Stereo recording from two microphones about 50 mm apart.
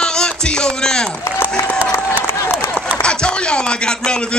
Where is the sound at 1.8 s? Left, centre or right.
Right.